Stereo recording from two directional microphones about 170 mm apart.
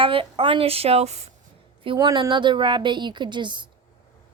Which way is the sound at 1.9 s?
30° right (ahead or behind).